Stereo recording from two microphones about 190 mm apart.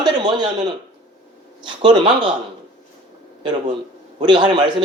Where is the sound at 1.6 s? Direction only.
25° right (ahead or behind).